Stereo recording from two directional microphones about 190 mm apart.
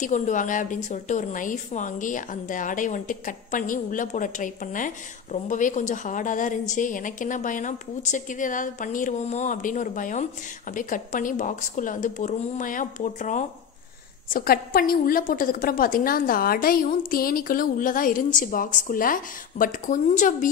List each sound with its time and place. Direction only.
0.0 s a woman's voice: 40° left (ahead or behind)